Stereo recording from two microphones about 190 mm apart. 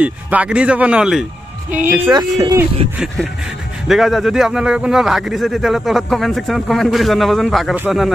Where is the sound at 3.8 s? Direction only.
Centre (ahead or behind).